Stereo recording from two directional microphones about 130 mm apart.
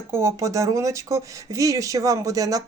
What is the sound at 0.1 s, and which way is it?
Speech, 20° right (ahead or behind).